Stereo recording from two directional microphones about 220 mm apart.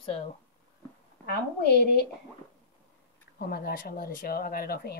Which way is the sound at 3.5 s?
45° left (ahead or behind).